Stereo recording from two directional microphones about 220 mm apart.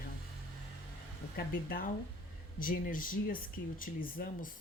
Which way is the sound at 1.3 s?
40° left (ahead or behind).